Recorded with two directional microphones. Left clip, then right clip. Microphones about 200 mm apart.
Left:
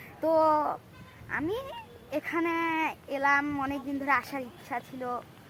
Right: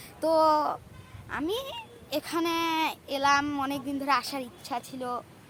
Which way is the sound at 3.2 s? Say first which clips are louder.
Right 1 dB; 10° right (ahead or behind).